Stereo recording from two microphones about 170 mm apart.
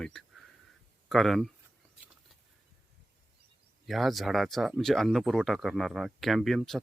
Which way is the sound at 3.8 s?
Centre (ahead or behind).